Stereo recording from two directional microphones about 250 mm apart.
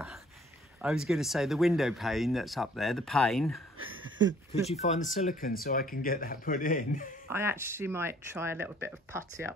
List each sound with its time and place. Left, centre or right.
0.8 s speech: centre
3.8 s a sound: right
4.6 s speech: left
7.2 s speech: centre